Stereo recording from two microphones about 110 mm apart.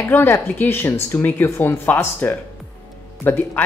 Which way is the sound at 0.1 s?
20° left (ahead or behind).